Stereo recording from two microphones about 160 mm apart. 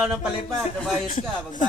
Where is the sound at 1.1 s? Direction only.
50° left (ahead or behind).